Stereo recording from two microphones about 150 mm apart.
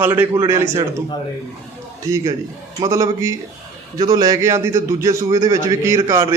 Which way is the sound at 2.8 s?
20° right (ahead or behind).